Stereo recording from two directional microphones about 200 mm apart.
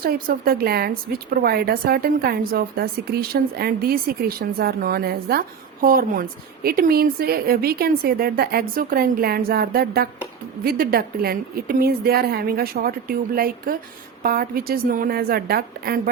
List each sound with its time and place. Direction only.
0.0 s speech: 50° right (ahead or behind)